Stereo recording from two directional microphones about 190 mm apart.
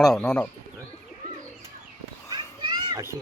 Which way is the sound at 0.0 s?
Centre (ahead or behind).